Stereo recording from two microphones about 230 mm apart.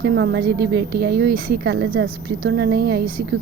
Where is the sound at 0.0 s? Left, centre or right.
Right.